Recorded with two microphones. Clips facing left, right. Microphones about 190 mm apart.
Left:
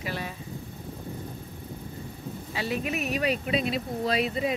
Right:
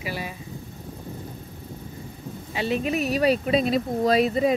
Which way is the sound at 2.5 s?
25° right (ahead or behind).